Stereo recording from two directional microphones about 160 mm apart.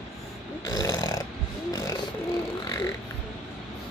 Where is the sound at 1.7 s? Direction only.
20° left (ahead or behind).